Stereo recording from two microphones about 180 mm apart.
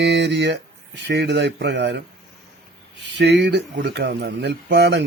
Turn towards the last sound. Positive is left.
turn(degrees=-70)  # may be behind; listen again after turning